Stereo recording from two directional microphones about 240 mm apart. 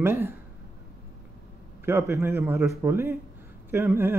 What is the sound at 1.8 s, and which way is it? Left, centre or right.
Speech, centre.